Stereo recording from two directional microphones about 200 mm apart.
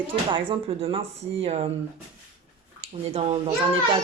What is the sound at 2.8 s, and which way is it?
Speech, 30° right (ahead or behind).